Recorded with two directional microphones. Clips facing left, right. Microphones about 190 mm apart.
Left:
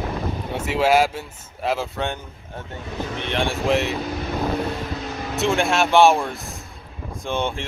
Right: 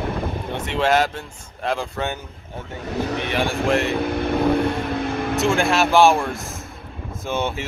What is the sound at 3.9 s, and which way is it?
Vehicle, 55° right (ahead or behind).